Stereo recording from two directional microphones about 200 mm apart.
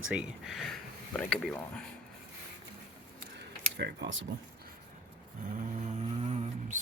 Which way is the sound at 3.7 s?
60° right (ahead or behind).